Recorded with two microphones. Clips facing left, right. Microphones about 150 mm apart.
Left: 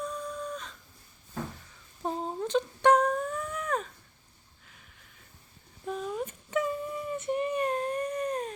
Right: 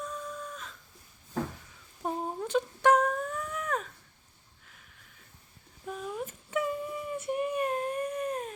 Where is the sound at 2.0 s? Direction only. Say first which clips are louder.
Left 1 dB; 10° right (ahead or behind).